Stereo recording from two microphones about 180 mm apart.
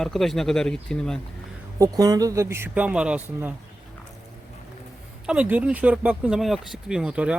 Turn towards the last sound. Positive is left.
turn(degrees=-5)  # may be behind; listen again after turning